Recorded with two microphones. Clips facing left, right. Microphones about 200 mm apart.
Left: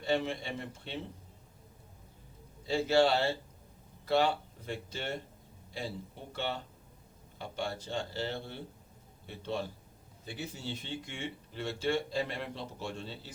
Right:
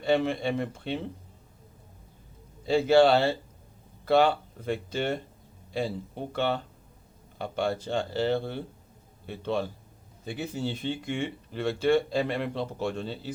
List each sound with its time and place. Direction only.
0.0 s speech: 65° right (ahead or behind)
2.6 s speech: 65° right (ahead or behind)
4.0 s speech: 65° right (ahead or behind)